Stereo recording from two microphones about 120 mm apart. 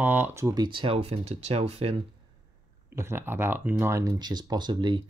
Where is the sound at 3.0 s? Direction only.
20° right (ahead or behind).